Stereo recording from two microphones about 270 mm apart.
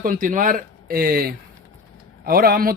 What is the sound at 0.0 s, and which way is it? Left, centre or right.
Speech, right.